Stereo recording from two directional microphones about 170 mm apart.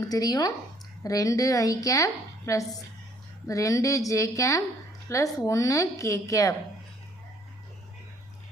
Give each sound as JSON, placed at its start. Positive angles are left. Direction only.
{"t": 0.1, "sound": "a woman's voice", "side_deg": 20}